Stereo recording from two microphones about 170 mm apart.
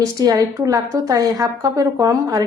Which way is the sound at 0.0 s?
20° right (ahead or behind).